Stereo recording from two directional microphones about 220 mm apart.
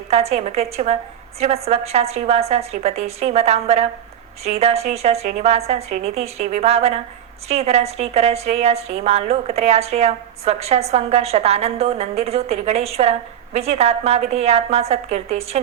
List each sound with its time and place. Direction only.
0.1 s a woman's voice: 30° right (ahead or behind)